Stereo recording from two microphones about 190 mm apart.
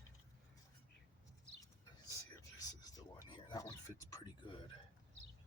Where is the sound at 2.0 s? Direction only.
20° left (ahead or behind).